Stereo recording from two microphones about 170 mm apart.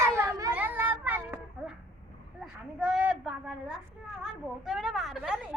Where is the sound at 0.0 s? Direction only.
15° right (ahead or behind).